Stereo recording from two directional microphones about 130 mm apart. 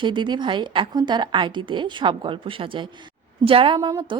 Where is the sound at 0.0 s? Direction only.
35° right (ahead or behind).